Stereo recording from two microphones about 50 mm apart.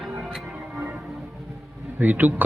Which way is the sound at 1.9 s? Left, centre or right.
Right.